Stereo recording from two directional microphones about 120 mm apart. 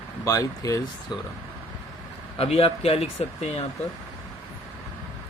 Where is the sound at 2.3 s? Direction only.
55° left (ahead or behind).